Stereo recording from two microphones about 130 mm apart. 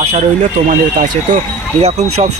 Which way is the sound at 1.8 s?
60° right (ahead or behind).